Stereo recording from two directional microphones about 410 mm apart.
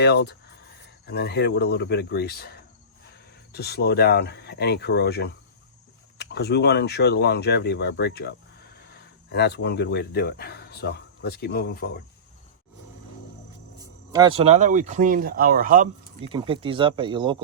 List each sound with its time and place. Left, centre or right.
0.0 s speech: left
13.7 s speech: centre